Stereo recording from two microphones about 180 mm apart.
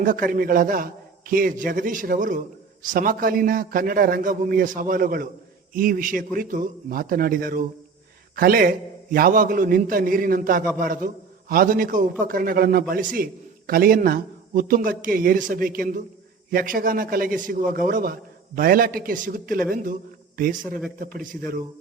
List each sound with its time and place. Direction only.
0.0 s a man's voice: 50° right (ahead or behind)